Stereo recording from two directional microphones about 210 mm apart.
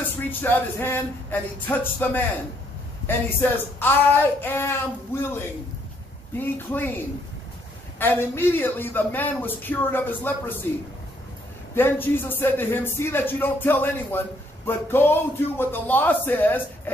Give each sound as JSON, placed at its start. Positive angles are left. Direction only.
{"t": 0.0, "sound": "a man's voice", "side_deg": 10}
{"t": 8.0, "sound": "a man's voice", "side_deg": 10}
{"t": 11.7, "sound": "a man's voice", "side_deg": 10}